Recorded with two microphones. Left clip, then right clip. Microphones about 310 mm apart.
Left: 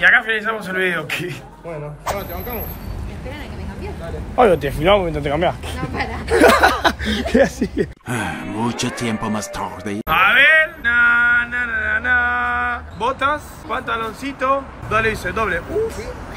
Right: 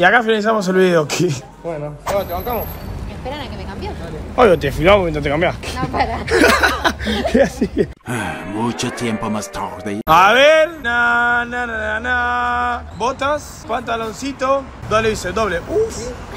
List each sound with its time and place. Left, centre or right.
0.0 s speech: centre
4.4 s mantra: centre
5.8 s speech: centre
6.2 s mantra: centre
10.0 s mantra: centre